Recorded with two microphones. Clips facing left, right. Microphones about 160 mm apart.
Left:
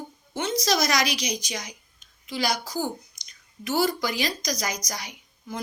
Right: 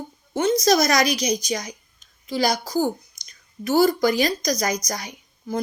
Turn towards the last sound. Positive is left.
turn(degrees=-45)  # may be behind; listen again after turning